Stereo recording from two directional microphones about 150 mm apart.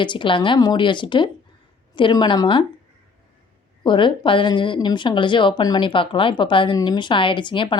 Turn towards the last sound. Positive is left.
turn(degrees=30)  # may be behind; listen again after turning